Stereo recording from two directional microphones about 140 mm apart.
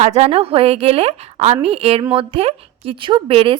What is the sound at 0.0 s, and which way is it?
A woman's voice, 50° right (ahead or behind).